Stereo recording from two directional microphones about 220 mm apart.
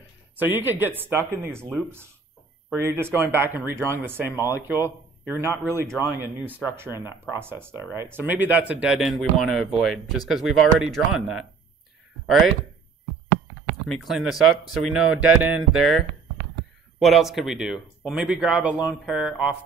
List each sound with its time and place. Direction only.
0.4 s a man's voice: 10° right (ahead or behind)
13.8 s a man's voice: centre (ahead or behind)
17.0 s a man's voice: centre (ahead or behind)